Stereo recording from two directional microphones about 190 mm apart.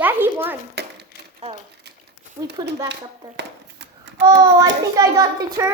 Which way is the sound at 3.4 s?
65° right (ahead or behind).